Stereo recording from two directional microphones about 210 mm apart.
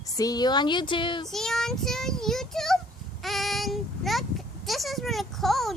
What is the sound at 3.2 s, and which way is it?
Child singing, centre (ahead or behind).